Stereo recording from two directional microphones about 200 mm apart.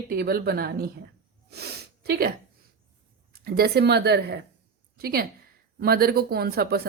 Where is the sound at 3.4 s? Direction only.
50° right (ahead or behind).